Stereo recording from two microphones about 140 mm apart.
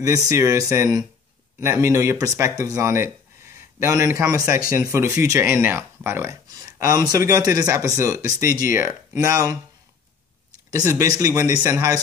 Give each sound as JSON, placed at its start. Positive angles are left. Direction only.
{"t": 0.0, "sound": "speech", "side_deg": -25}
{"t": 10.7, "sound": "speech", "side_deg": -20}